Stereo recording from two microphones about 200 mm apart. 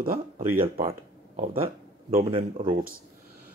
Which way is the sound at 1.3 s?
35° right (ahead or behind).